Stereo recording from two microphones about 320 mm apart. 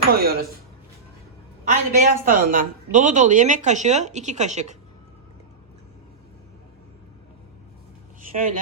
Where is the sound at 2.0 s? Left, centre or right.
Right.